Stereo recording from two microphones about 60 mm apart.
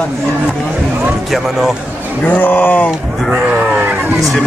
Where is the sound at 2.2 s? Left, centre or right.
Left.